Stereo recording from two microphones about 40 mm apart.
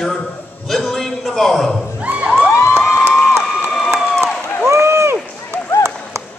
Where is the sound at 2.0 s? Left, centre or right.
Right.